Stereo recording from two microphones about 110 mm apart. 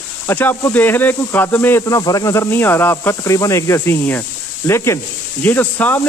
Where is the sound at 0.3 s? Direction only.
20° left (ahead or behind).